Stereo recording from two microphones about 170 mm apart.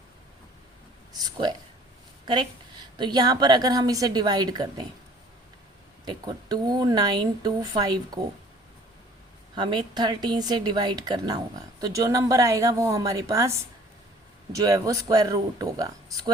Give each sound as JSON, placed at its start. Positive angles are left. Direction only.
{"t": 1.2, "sound": "a sound", "side_deg": -25}
{"t": 3.0, "sound": "speech", "side_deg": -25}
{"t": 6.1, "sound": "speech", "side_deg": -25}
{"t": 9.6, "sound": "speech", "side_deg": -25}